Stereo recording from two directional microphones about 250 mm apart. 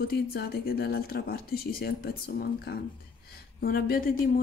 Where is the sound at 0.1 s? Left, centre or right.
Left.